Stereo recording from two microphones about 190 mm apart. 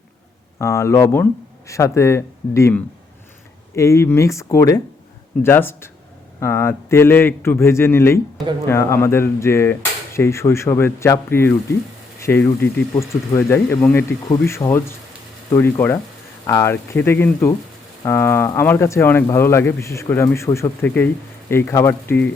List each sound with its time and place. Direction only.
0.6 s speech: 15° left (ahead or behind)